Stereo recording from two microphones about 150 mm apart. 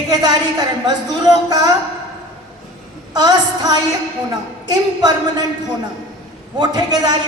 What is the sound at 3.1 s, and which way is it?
Speech, 30° right (ahead or behind).